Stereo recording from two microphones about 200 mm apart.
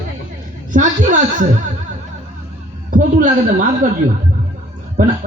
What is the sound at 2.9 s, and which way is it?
A man's voice, 40° right (ahead or behind).